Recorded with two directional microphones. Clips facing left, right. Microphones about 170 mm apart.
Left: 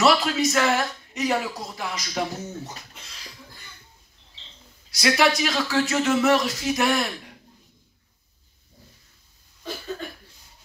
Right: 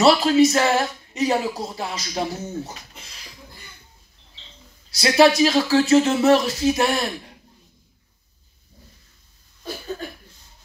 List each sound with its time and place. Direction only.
0.0 s a man's voice: 30° right (ahead or behind)
4.9 s a man's voice: 30° right (ahead or behind)